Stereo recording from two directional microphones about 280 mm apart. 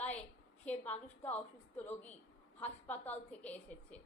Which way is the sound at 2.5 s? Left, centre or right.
Centre.